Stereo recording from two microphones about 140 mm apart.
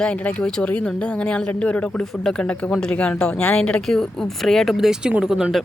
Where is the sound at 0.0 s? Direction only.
5° left (ahead or behind).